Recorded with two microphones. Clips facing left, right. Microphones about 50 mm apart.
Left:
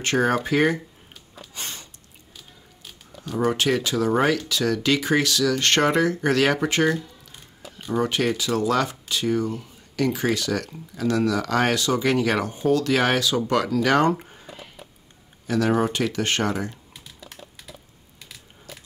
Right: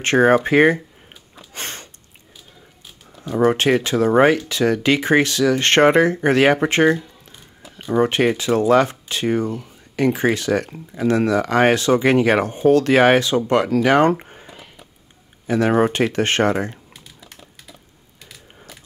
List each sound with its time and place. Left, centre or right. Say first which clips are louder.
0.0 s speech: right 7 dB; right
1.5 s a sound: right 5 dB; right
3.3 s speech: right 6 dB; right
14.0 s a sound: right 4 dB; right
15.4 s speech: right 4 dB; right
15.7 s speech: right 5 dB; right